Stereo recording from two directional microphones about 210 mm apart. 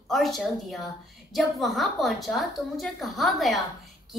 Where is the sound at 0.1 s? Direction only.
Centre (ahead or behind).